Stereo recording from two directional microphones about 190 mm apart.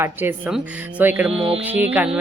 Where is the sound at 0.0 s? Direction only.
10° right (ahead or behind).